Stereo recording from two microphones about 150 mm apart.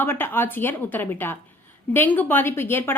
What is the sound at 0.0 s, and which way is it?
A woman's voice, 15° left (ahead or behind).